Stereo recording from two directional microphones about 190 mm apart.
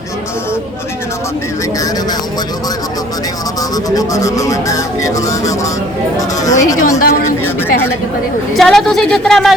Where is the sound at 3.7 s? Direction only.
20° left (ahead or behind).